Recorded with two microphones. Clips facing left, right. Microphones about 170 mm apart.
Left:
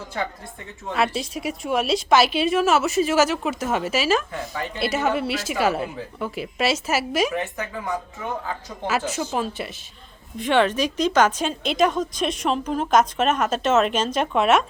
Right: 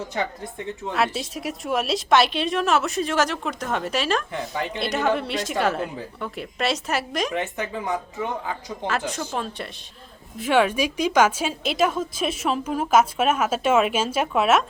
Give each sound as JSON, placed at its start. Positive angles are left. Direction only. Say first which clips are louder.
{"t": 0.9, "sound": "a woman's voice", "louder": "left 2 dB", "side_deg": 0}
{"t": 7.3, "sound": "speech", "louder": "right 1 dB", "side_deg": -20}
{"t": 8.9, "sound": "a woman's voice", "louder": "left 3 dB", "side_deg": 5}
{"t": 10.3, "sound": "a woman's voice", "louder": "even", "side_deg": -5}